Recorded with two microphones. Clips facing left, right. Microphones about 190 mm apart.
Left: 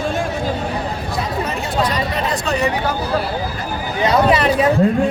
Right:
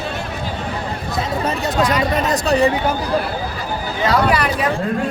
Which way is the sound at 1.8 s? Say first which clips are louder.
Right 3 dB; 45° right (ahead or behind).